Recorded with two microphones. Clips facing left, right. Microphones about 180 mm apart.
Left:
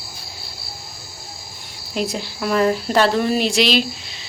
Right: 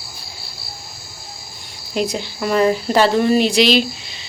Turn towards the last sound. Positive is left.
turn(degrees=0)  # may be behind; listen again after turning